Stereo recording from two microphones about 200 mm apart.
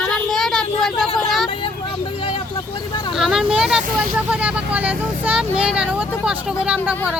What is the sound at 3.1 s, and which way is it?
Speech, centre (ahead or behind).